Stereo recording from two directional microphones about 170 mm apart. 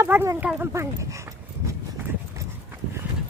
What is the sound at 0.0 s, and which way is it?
Speech, 15° right (ahead or behind).